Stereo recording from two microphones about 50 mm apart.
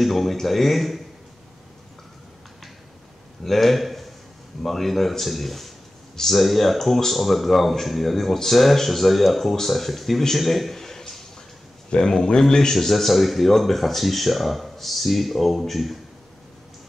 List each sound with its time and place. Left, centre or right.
0.0 s a man's voice: centre
3.4 s a man's voice: centre